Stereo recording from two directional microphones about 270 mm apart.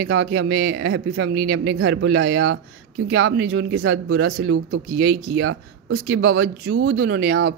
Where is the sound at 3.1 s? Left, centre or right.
Right.